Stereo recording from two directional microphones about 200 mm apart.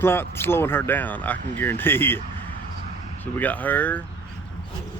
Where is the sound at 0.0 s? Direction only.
10° left (ahead or behind).